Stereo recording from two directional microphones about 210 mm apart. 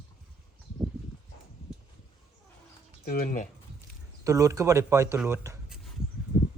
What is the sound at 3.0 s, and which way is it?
Speech, 45° left (ahead or behind).